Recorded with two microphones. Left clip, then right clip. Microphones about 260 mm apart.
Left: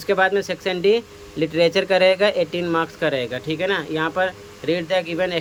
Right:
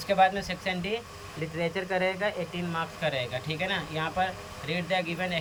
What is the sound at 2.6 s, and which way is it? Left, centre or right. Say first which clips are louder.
Speech: left 10 dB; centre.